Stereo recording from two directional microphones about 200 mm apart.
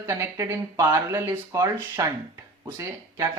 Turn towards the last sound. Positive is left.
turn(degrees=-15)  # may be behind; listen again after turning